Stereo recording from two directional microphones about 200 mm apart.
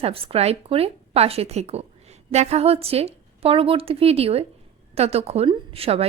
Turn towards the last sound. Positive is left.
turn(degrees=-30)  # may be behind; listen again after turning